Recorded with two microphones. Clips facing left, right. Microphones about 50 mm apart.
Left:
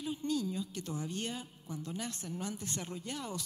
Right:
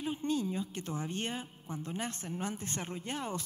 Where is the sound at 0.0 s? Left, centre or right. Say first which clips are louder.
Right 2 dB; right.